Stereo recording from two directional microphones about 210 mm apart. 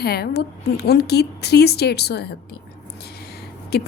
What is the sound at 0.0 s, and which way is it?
A woman's voice, 50° left (ahead or behind).